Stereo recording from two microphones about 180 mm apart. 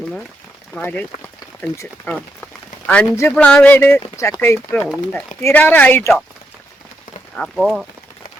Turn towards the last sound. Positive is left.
turn(degrees=0)  # may be behind; listen again after turning